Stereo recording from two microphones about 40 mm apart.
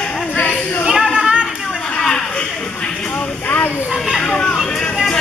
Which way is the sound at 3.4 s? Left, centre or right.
Left.